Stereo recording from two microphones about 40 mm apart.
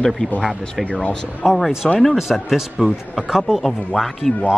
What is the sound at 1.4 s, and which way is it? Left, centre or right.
A man's voice, centre.